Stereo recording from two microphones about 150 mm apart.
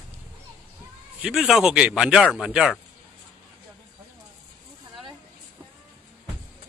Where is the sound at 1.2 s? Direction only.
5° right (ahead or behind).